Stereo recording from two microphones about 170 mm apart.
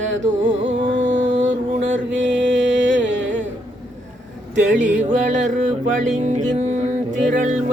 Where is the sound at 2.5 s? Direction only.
90° right.